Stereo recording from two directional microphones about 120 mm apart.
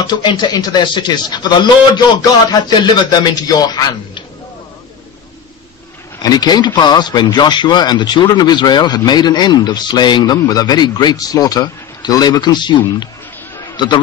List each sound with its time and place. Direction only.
0.0 s speech: 40° left (ahead or behind)
6.2 s a man's voice: 35° left (ahead or behind)